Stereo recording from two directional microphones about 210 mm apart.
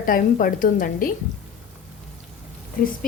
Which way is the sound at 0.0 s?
40° left (ahead or behind).